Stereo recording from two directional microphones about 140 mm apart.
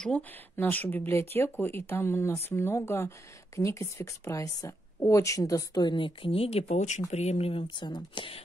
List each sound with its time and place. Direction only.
0.0 s a woman's voice: 10° left (ahead or behind); by 8.4 s 35° left (ahead or behind)